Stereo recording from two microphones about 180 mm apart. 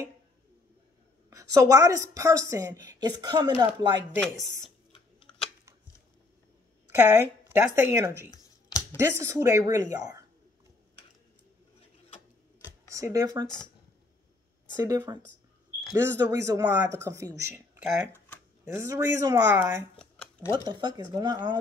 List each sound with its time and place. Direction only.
1.3 s speech: 15° right (ahead or behind)
5.3 s scissors: 20° left (ahead or behind)
7.1 s speech: 15° right (ahead or behind)
12.9 s speech: 20° right (ahead or behind)
14.8 s speech: 20° right (ahead or behind)
18.7 s speech: 15° right (ahead or behind)
20.0 s a sound: 5° left (ahead or behind)
20.5 s speech: 25° right (ahead or behind)